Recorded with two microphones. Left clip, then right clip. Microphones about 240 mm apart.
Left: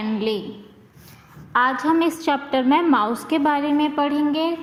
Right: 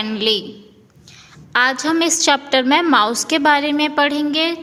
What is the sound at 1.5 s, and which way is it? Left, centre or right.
A woman's voice, right.